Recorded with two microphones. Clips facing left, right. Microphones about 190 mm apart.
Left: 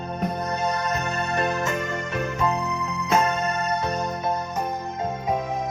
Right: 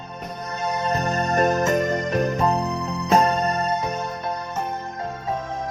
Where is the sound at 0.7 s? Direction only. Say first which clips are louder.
Right 3 dB; 30° right (ahead or behind).